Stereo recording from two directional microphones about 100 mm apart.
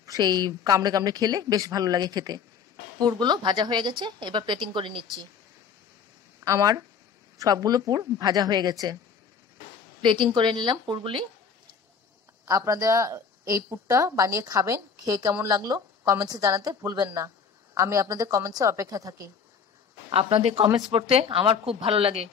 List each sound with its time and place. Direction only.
0.0 s a woman's voice: 40° right (ahead or behind)
6.4 s a woman's voice: 35° right (ahead or behind)
10.0 s a woman's voice: 50° right (ahead or behind)
12.4 s a woman's voice: 35° right (ahead or behind)
20.1 s speech: 75° right (ahead or behind)